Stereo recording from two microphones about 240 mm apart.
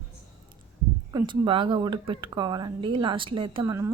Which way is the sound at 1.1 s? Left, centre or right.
Centre.